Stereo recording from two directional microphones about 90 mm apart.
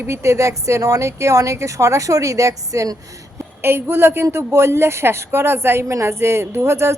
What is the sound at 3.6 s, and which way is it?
A woman's voice, 25° right (ahead or behind).